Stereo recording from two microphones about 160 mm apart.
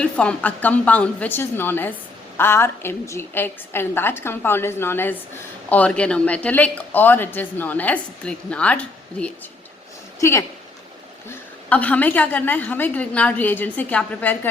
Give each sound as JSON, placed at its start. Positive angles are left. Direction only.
{"t": 0.0, "sound": "a woman's voice", "side_deg": 5}